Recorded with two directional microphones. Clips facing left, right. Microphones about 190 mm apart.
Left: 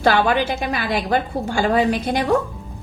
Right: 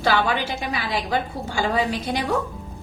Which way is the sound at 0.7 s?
50° left (ahead or behind).